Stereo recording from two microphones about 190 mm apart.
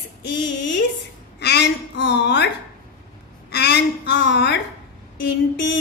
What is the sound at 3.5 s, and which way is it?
A woman's voice, 60° left (ahead or behind).